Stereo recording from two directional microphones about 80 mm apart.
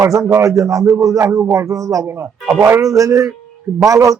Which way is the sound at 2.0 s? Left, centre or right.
Right.